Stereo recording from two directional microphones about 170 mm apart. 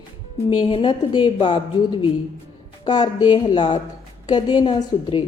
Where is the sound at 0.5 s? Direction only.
30° left (ahead or behind).